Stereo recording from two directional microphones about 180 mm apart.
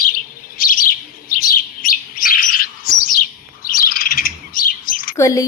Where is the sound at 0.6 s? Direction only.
50° left (ahead or behind).